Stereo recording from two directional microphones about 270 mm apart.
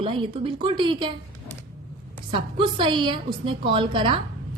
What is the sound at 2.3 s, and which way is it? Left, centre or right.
A woman's voice, centre.